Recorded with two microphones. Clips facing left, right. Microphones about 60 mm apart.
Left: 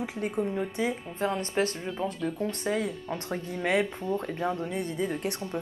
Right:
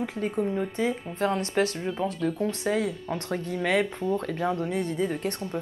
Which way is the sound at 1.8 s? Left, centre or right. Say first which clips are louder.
Right 3 dB; centre.